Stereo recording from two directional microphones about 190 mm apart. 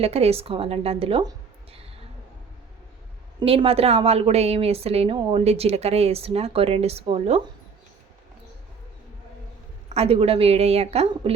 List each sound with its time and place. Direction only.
0.0 s a woman's voice: 35° right (ahead or behind)
3.4 s a woman's voice: 30° right (ahead or behind)
9.9 s a woman's voice: 30° right (ahead or behind)